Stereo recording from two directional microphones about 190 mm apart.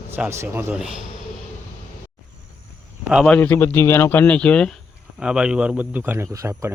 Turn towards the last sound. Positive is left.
turn(degrees=-10)  # may be behind; listen again after turning